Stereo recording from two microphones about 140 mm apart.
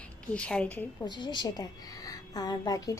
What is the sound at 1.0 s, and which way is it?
A woman's voice, 30° left (ahead or behind).